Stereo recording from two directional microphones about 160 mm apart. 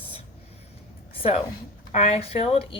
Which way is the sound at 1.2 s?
40° left (ahead or behind).